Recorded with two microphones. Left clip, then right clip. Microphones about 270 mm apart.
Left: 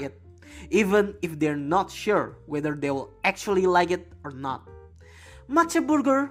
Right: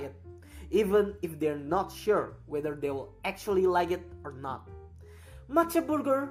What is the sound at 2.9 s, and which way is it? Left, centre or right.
Speech, left.